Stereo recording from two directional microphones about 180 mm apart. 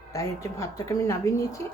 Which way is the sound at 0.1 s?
20° left (ahead or behind).